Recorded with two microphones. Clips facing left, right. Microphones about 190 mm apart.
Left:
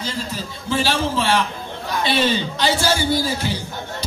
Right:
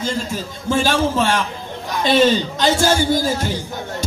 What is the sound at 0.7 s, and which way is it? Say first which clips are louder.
Speech: right 3 dB; 45° right (ahead or behind).